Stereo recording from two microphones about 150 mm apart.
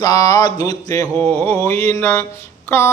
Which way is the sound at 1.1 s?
15° left (ahead or behind).